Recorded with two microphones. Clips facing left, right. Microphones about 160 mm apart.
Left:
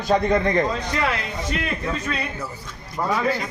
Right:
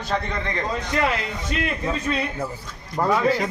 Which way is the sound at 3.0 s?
50° right (ahead or behind).